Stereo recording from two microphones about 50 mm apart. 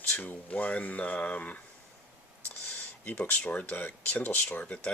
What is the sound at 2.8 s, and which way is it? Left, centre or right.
Speech, left.